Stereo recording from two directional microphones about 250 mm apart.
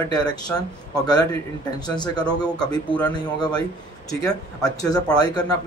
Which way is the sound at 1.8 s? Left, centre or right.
Centre.